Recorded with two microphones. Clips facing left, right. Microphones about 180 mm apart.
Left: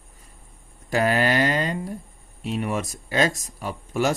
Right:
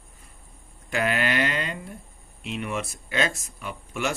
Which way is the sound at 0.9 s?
35° left (ahead or behind).